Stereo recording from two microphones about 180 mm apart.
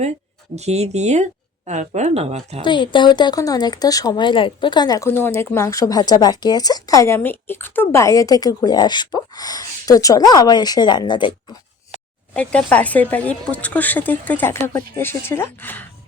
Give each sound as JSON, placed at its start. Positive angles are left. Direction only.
{"t": 0.5, "sound": "speech", "side_deg": -35}
{"t": 2.6, "sound": "speech", "side_deg": 25}
{"t": 12.3, "sound": "speech", "side_deg": 5}